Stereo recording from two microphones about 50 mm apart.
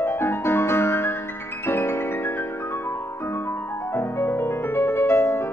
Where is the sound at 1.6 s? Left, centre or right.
Left.